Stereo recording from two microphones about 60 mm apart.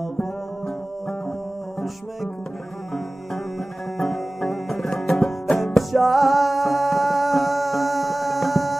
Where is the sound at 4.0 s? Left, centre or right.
Centre.